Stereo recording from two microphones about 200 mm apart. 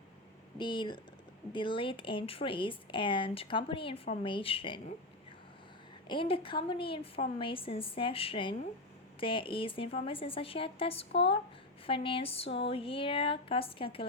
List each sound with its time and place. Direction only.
0.6 s speech: 25° left (ahead or behind)
6.1 s speech: 25° left (ahead or behind)